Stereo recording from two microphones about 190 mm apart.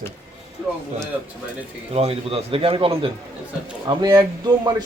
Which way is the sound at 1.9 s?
30° right (ahead or behind).